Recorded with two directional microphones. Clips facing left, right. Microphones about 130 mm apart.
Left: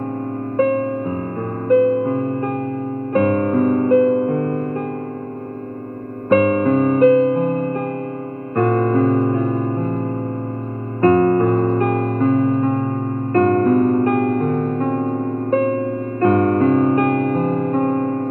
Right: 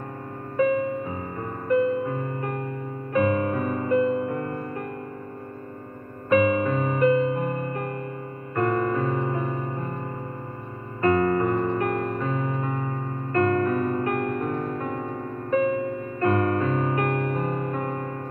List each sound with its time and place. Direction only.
1.8 s music: 35° left (ahead or behind)
6.3 s music: 40° left (ahead or behind)
11.0 s music: 40° left (ahead or behind)
11.9 s music: 45° left (ahead or behind)